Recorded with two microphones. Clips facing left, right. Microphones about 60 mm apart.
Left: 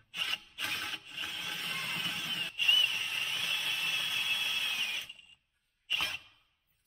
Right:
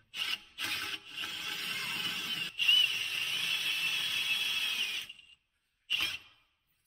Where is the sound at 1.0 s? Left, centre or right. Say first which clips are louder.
Left 1 dB; centre.